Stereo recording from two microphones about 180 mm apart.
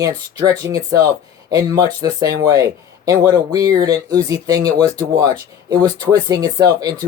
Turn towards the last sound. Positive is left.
turn(degrees=-20)  # may be behind; listen again after turning